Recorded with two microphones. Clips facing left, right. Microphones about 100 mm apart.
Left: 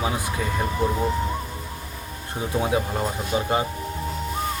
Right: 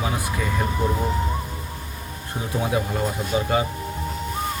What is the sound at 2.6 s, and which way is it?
Speech, 20° left (ahead or behind).